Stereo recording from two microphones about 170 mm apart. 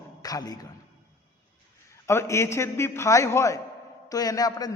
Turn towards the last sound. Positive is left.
turn(degrees=20)  # may be behind; listen again after turning